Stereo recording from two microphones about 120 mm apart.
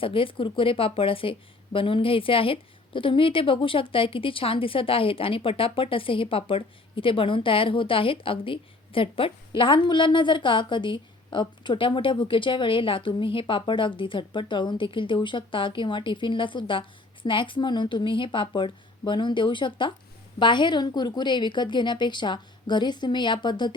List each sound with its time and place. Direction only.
0.0 s a woman's voice: 50° left (ahead or behind)